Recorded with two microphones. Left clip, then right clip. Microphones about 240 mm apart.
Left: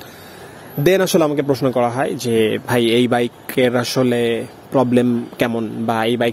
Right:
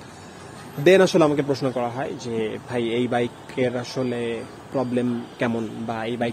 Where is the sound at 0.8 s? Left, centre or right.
Left.